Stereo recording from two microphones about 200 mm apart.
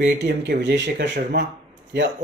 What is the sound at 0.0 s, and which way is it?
Speech, 60° right (ahead or behind).